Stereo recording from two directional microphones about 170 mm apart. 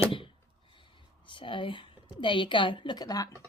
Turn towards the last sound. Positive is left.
turn(degrees=20)  # may be behind; listen again after turning